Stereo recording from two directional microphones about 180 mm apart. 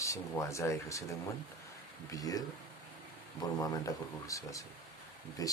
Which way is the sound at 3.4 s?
20° left (ahead or behind).